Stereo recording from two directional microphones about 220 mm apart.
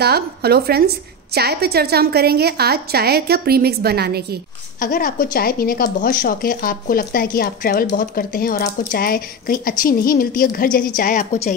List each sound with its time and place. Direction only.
0.0 s a woman's voice: 45° right (ahead or behind)
4.7 s speech: 40° left (ahead or behind)